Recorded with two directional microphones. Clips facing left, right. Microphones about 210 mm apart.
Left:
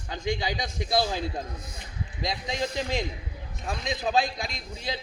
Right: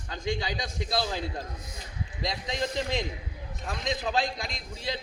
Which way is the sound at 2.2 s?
10° left (ahead or behind).